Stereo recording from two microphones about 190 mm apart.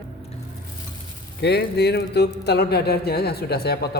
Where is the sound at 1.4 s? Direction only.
60° left (ahead or behind).